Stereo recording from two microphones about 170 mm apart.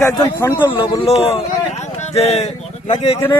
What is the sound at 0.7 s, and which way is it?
Speech, 30° left (ahead or behind).